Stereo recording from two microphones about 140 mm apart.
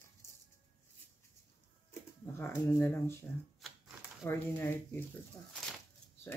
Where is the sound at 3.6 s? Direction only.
Centre (ahead or behind).